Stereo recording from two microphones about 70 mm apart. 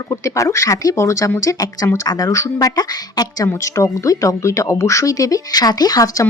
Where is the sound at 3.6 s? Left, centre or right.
Left.